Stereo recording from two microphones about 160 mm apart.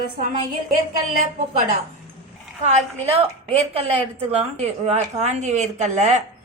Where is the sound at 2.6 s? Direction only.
40° right (ahead or behind).